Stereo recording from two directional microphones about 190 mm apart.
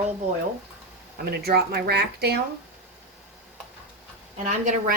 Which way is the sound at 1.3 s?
55° right (ahead or behind).